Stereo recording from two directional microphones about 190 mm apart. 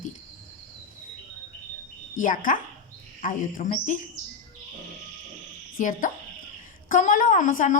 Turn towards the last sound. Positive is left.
turn(degrees=45)  # may be behind; listen again after turning